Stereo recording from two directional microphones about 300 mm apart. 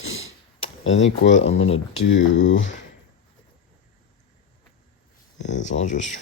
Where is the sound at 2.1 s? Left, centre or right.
Left.